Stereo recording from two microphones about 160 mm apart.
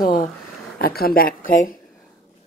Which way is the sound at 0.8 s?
70° left (ahead or behind).